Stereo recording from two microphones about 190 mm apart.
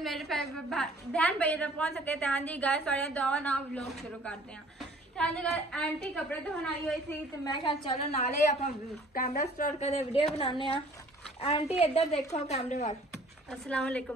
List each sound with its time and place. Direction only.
0.0 s a woman's voice: centre (ahead or behind)
8.2 s a woman's voice: 45° left (ahead or behind)
13.5 s a woman's voice: 5° left (ahead or behind)